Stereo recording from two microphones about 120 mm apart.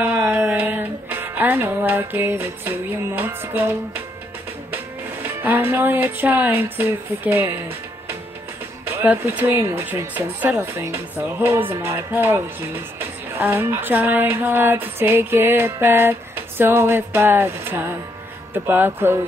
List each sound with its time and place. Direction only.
0.0 s music: 15° right (ahead or behind)
4.6 s speech: 15° right (ahead or behind)
8.8 s music: 15° right (ahead or behind)